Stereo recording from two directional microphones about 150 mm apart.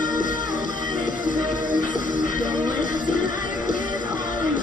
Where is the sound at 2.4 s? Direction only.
30° right (ahead or behind).